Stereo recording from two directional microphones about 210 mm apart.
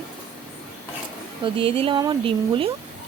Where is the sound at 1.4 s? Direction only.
25° right (ahead or behind).